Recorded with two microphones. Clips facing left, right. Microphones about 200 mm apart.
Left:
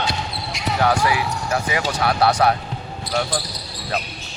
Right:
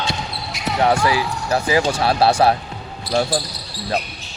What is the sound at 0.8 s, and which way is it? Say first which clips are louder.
Speech: right 2 dB; 25° right (ahead or behind).